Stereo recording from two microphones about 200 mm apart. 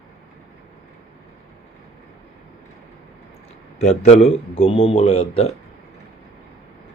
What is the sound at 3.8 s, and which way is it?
A man's voice, 30° left (ahead or behind).